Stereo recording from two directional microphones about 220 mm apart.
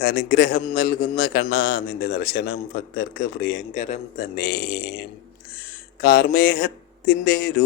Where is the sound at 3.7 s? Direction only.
35° left (ahead or behind).